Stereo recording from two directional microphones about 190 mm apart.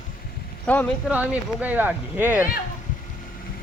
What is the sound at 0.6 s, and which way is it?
Speech, 10° left (ahead or behind).